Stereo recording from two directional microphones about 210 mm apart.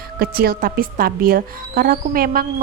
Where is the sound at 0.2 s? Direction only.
45° right (ahead or behind).